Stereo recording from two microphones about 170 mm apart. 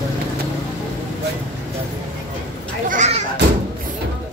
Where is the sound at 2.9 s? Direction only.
45° right (ahead or behind).